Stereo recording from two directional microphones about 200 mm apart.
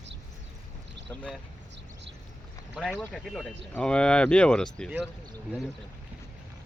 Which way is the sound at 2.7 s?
Centre (ahead or behind).